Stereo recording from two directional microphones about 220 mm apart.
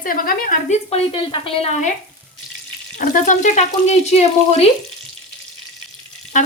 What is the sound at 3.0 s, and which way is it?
Speech, 35° left (ahead or behind).